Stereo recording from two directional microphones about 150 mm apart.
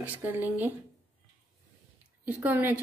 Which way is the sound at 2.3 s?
10° right (ahead or behind).